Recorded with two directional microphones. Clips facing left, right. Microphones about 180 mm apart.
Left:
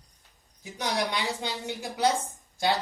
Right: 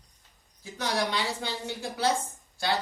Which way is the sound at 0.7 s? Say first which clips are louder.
Even; 15° left (ahead or behind).